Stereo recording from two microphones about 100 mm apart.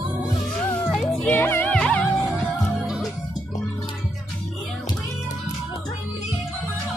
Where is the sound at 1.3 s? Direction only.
20° left (ahead or behind).